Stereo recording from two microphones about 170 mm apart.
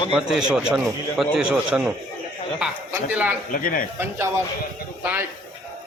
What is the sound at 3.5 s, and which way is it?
Speech, 55° left (ahead or behind).